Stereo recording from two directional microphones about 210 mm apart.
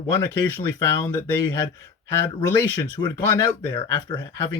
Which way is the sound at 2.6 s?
20° left (ahead or behind).